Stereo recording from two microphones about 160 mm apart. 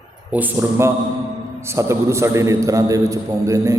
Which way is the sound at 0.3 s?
10° right (ahead or behind).